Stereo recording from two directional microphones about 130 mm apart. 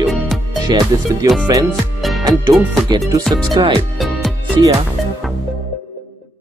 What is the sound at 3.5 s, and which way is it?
Speech, 40° right (ahead or behind).